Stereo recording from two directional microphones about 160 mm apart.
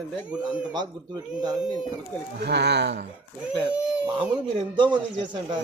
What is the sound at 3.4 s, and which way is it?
Speech, 5° right (ahead or behind).